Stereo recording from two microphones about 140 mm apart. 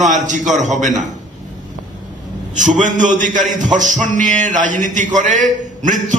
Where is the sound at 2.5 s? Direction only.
65° right (ahead or behind).